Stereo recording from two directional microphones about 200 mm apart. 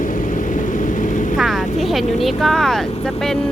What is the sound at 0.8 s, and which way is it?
Vehicle, 40° left (ahead or behind).